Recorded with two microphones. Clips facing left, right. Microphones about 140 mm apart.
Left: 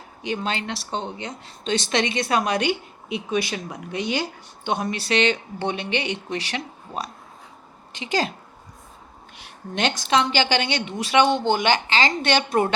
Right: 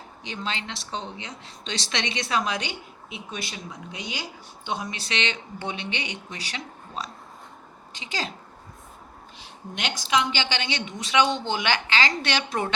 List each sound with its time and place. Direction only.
0.2 s a woman's voice: 55° left (ahead or behind)
9.4 s a woman's voice: 65° left (ahead or behind)
11.4 s speech: 45° left (ahead or behind)